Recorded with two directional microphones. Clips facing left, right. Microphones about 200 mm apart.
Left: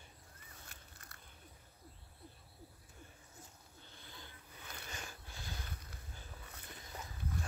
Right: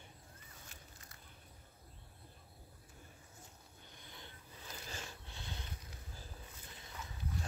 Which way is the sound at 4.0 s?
20° right (ahead or behind).